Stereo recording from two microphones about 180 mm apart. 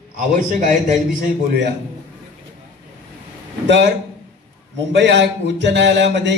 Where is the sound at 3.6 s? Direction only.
75° right (ahead or behind).